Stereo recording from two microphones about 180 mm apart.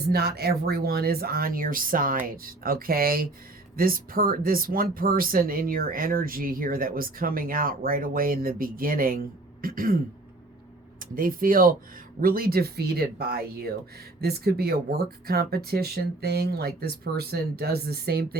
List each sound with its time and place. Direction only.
0.1 s speech: 60° right (ahead or behind)
11.0 s speech: 50° right (ahead or behind)